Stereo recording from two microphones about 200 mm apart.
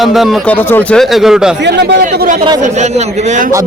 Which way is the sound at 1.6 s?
55° right (ahead or behind).